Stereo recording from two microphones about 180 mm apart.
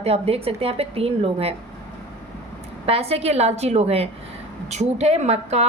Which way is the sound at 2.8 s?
35° right (ahead or behind).